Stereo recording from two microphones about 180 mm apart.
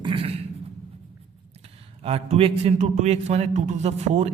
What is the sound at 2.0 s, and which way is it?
A man's voice, 35° right (ahead or behind).